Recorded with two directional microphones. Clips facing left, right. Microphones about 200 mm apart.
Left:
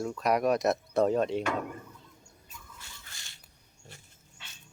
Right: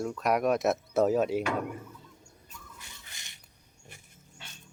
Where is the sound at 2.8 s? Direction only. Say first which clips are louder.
Even; 20° right (ahead or behind).